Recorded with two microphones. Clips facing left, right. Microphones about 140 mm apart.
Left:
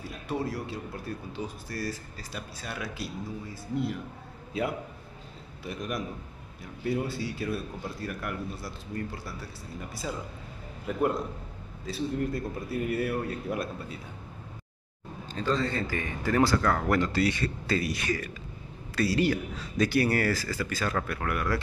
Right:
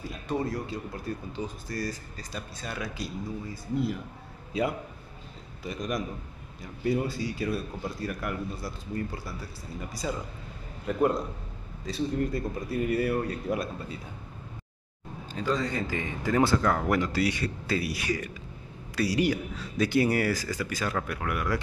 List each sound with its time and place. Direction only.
0.3 s speech: 5° left (ahead or behind)
15.3 s speech: 15° right (ahead or behind)